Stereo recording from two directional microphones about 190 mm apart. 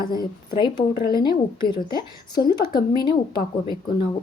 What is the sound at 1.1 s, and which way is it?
A woman's voice, 25° left (ahead or behind).